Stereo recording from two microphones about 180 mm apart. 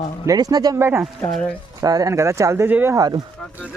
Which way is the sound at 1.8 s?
20° right (ahead or behind).